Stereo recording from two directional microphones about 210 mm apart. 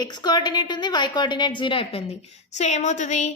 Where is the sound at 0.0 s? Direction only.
20° left (ahead or behind).